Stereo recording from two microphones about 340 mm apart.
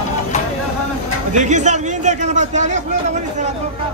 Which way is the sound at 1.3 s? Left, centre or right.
Right.